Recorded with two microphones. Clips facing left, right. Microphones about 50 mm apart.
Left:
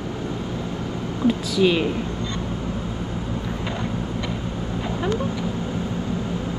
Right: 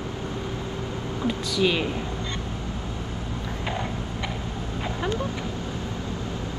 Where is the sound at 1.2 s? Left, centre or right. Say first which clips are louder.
Left 5 dB; centre.